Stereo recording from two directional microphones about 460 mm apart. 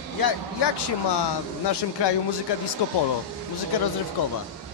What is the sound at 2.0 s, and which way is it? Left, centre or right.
Speech, left.